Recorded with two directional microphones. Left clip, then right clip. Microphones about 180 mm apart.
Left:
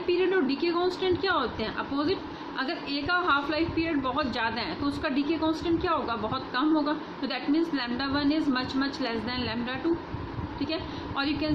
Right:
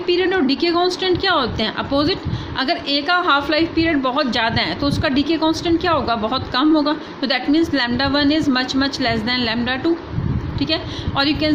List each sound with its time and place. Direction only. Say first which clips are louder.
0.1 s a woman's voice: right 8 dB; 45° right (ahead or behind)
11.2 s a woman's voice: right 11 dB; 50° right (ahead or behind)